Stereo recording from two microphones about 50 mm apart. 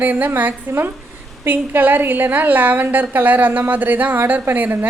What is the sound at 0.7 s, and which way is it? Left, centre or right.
Speech, right.